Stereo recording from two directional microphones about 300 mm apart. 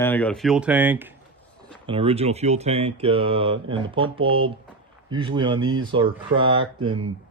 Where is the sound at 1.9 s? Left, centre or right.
Centre.